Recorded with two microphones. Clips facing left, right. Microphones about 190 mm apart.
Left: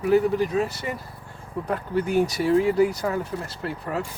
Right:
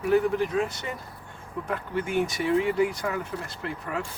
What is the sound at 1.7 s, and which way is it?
Speech, 40° left (ahead or behind).